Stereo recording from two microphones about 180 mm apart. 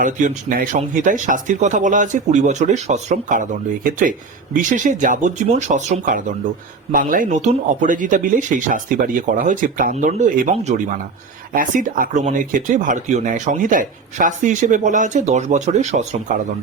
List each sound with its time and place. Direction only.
0.0 s speech: 45° right (ahead or behind)
11.5 s speech: 50° right (ahead or behind)